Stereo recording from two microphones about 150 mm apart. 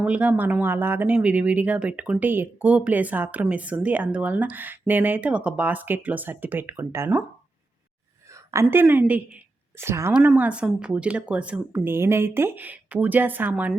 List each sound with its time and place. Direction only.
0.0 s speech: 10° right (ahead or behind)
8.4 s speech: 15° right (ahead or behind)